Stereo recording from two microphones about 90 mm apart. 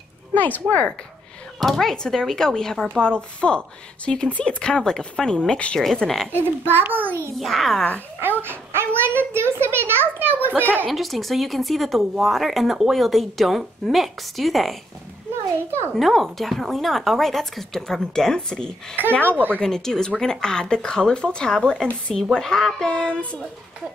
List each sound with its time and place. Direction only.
0.3 s speech: 20° left (ahead or behind)
1.6 s speech: 5° left (ahead or behind)
6.7 s a child's voice: 20° right (ahead or behind)
7.3 s speech: centre (ahead or behind)
8.2 s a child's voice: 25° right (ahead or behind)
10.9 s speech: centre (ahead or behind)
16.0 s speech: centre (ahead or behind)
19.2 s a child's voice: 20° right (ahead or behind)
19.5 s speech: 5° left (ahead or behind)